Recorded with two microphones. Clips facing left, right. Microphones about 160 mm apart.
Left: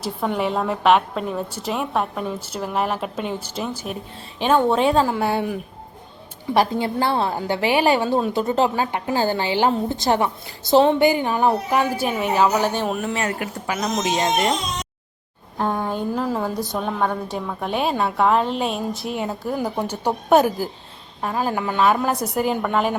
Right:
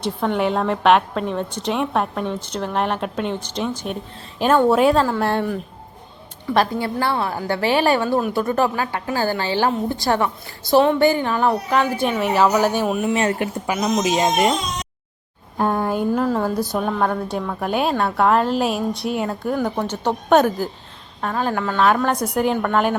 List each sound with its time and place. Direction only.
0.0 s a woman's voice: 5° left (ahead or behind)
12.3 s a woman's voice: 5° right (ahead or behind)
13.1 s speech: 30° right (ahead or behind)
13.8 s speech: 10° right (ahead or behind)
15.5 s a sound: 5° right (ahead or behind)
16.4 s a woman's voice: centre (ahead or behind)